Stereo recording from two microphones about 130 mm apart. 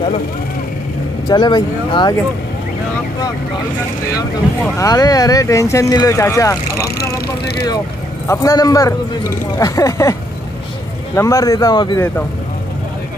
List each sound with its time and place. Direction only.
1.3 s speech: 35° left (ahead or behind)
4.7 s speech: 30° left (ahead or behind)
8.3 s speech: 25° left (ahead or behind)
11.1 s speech: 25° left (ahead or behind)